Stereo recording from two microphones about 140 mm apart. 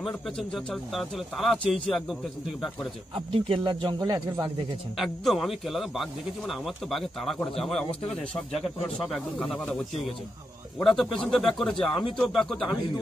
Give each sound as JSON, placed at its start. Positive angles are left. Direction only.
{"t": 0.0, "sound": "speech", "side_deg": 0}
{"t": 3.3, "sound": "speech", "side_deg": -40}
{"t": 4.9, "sound": "speech", "side_deg": 0}
{"t": 10.8, "sound": "speech", "side_deg": 5}